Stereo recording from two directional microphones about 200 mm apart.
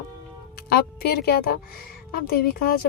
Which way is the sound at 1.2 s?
50° left (ahead or behind).